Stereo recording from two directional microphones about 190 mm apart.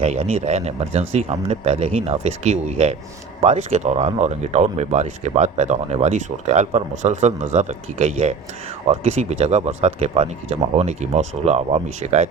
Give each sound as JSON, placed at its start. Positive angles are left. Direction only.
{"t": 0.0, "sound": "speech", "side_deg": -30}